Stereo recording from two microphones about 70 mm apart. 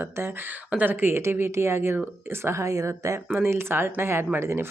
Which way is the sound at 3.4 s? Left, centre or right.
Right.